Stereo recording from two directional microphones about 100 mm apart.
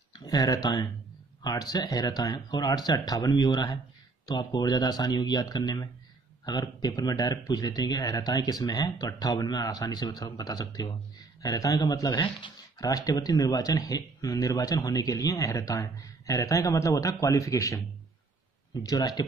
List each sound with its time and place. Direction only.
0.1 s speech: 40° left (ahead or behind)
12.2 s speech: 55° left (ahead or behind)
12.7 s speech: 40° left (ahead or behind)
18.8 s speech: 40° left (ahead or behind)